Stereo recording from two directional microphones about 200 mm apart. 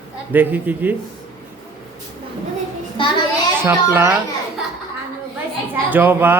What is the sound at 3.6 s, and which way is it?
Speech, 10° right (ahead or behind).